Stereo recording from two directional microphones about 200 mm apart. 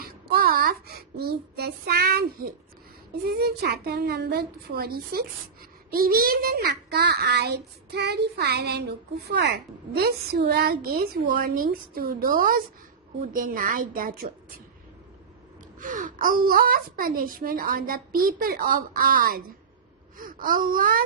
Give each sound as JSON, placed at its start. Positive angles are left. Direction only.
{"t": 0.0, "sound": "a child's voice", "side_deg": -50}
{"t": 15.8, "sound": "a child's voice", "side_deg": -40}